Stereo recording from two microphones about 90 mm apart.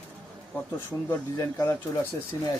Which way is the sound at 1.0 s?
30° left (ahead or behind).